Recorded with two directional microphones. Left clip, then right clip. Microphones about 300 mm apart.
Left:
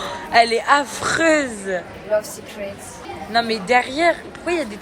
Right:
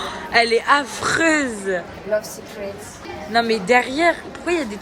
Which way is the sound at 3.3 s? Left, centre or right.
Centre.